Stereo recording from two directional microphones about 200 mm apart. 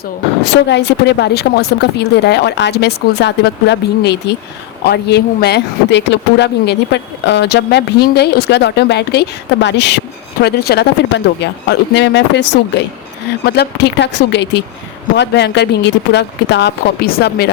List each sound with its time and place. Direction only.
0.7 s speech: 55° left (ahead or behind)